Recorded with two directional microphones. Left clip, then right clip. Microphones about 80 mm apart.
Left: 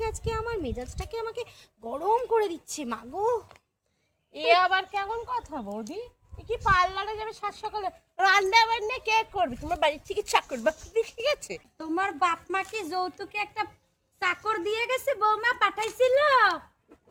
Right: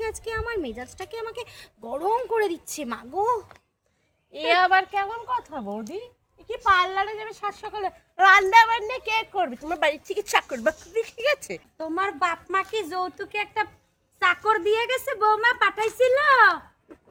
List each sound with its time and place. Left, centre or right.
0.0 s a woman's voice: right
10.3 s speech: centre
11.0 s speech: right